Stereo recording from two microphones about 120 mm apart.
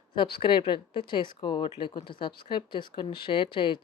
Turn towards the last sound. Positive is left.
turn(degrees=45)  # may be behind; listen again after turning